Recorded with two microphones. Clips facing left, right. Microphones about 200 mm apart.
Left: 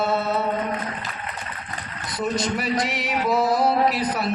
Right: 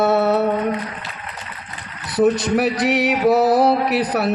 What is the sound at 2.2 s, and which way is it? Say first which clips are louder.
Music: right 8 dB; 70° right (ahead or behind).